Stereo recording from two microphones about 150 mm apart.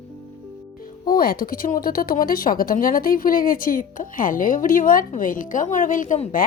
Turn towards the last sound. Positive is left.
turn(degrees=60)  # may be behind; listen again after turning